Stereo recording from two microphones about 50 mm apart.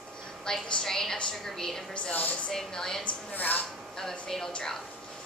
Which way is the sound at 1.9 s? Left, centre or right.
Left.